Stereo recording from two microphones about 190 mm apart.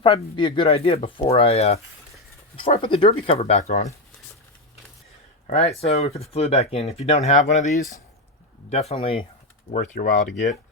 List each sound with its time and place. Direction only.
0.0 s speech: 25° left (ahead or behind)
5.5 s speech: 35° left (ahead or behind)